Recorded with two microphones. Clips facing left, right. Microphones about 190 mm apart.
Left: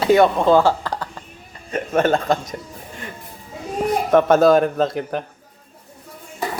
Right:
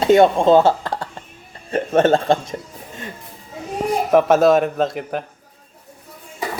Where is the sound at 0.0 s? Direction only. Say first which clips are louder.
Right 2 dB; 25° right (ahead or behind).